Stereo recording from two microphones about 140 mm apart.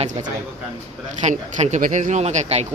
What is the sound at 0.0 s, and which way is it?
Speech, 60° right (ahead or behind).